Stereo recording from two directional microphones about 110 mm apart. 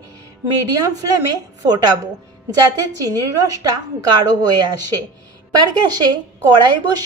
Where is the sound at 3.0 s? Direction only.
30° right (ahead or behind).